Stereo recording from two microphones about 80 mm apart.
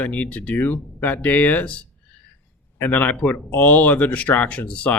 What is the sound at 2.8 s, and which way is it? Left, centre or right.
Speech, left.